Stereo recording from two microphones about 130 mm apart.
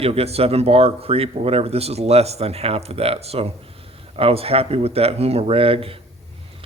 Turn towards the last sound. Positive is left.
turn(degrees=-45)  # may be behind; listen again after turning